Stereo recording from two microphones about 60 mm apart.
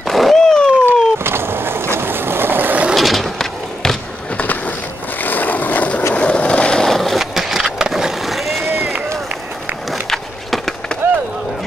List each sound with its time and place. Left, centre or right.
0.1 s a sound: centre
0.4 s a sound: centre
0.8 s boat: right
2.9 s skateboard: centre
4.4 s a sound: left
5.2 s vehicle: left
6.1 s skateboard: centre
6.9 s skateboard: centre
9.8 s wood: centre